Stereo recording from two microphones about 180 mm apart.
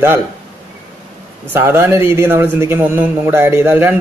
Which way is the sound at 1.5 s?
15° right (ahead or behind).